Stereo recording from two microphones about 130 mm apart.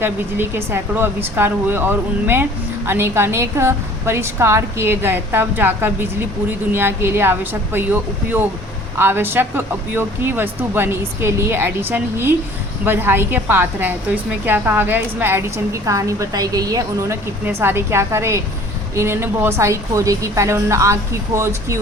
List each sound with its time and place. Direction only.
0.0 s speech: 15° right (ahead or behind)
9.0 s a woman's voice: 15° right (ahead or behind)
17.4 s a woman's voice: 15° right (ahead or behind)